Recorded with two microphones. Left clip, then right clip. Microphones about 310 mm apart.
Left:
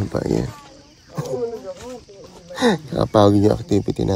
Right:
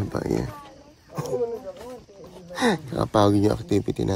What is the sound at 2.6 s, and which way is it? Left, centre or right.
Speech, centre.